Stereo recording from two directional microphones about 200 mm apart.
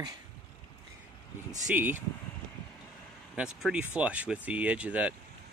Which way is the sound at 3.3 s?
5° right (ahead or behind).